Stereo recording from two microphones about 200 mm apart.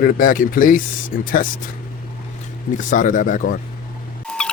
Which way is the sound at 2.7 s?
40° left (ahead or behind).